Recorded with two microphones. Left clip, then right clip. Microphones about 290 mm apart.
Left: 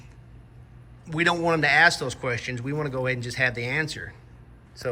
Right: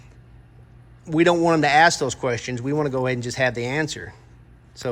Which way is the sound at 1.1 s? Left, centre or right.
Centre.